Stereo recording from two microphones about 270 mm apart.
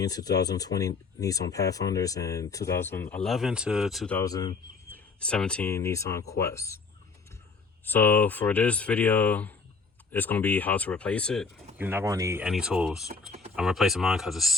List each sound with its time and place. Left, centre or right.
0.0 s speech: centre
7.9 s speech: centre
11.8 s speech: centre
13.1 s typing: right
13.6 s speech: centre